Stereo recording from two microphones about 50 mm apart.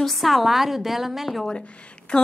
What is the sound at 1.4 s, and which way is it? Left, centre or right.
Speech, left.